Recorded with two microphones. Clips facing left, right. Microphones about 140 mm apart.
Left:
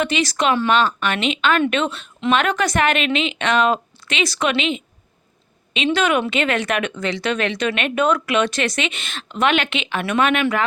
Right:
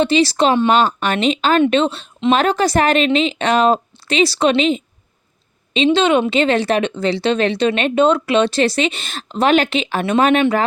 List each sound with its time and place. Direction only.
0.0 s speech: 30° right (ahead or behind)
0.7 s speech: 40° right (ahead or behind)